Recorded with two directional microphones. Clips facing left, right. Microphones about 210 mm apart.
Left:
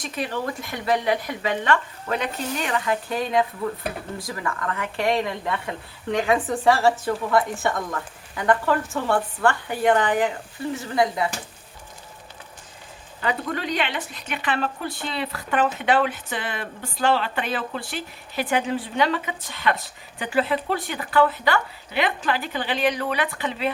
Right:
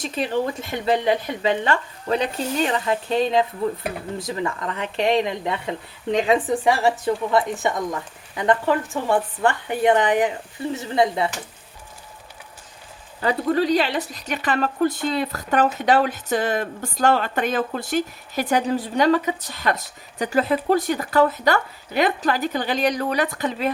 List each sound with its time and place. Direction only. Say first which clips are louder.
0.0 s a woman's voice: right 5 dB; 25° right (ahead or behind)
13.2 s speech: right 7 dB; 35° right (ahead or behind)